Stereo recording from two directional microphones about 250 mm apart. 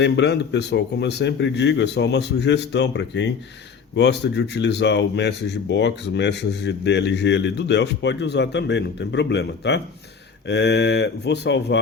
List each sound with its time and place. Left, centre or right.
0.0 s speech: left